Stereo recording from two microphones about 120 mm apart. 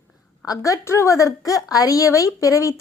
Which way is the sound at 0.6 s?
25° left (ahead or behind).